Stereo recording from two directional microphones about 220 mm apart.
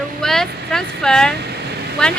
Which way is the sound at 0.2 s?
Centre (ahead or behind).